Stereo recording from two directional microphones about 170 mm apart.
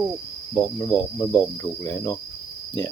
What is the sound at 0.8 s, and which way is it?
Speech, 20° left (ahead or behind).